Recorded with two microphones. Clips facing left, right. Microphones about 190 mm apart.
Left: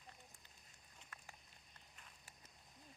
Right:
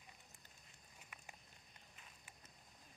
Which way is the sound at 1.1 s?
15° right (ahead or behind).